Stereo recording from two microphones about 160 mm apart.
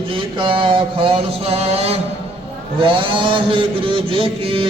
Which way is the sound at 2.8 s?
35° right (ahead or behind).